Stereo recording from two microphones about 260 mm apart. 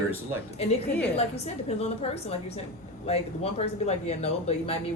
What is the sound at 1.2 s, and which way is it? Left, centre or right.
Speech, left.